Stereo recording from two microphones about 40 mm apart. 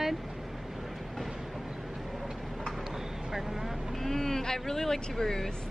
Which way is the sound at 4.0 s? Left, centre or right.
Centre.